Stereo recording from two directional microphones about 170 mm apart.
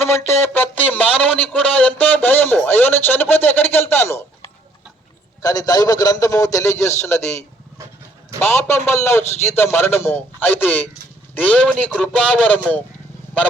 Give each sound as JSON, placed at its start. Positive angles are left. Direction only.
{"t": 0.0, "sound": "speech", "side_deg": 15}
{"t": 5.4, "sound": "a man's voice", "side_deg": 20}